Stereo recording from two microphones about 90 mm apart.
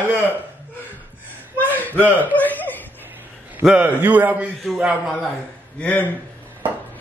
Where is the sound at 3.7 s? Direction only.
15° right (ahead or behind).